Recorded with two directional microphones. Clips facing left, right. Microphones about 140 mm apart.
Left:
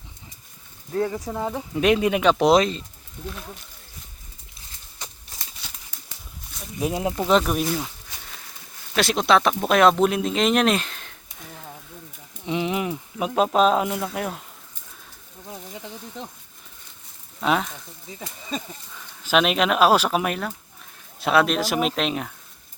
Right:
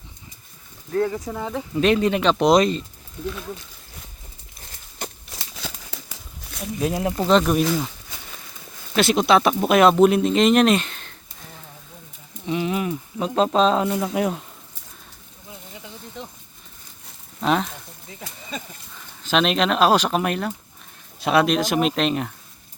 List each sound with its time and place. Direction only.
0.9 s speech: 15° left (ahead or behind)
4.9 s a sound: 70° right (ahead or behind)
6.7 s speech: 15° left (ahead or behind)
7.3 s speech: 5° left (ahead or behind)
9.0 s speech: centre (ahead or behind)
12.5 s speech: 20° left (ahead or behind)
14.0 s speech: 5° right (ahead or behind)
17.4 s speech: 5° left (ahead or behind)
19.2 s speech: 5° left (ahead or behind)